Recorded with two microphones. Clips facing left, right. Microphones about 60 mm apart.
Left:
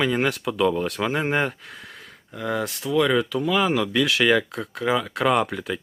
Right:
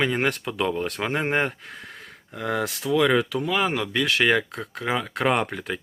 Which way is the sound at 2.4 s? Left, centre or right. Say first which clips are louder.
Even; right.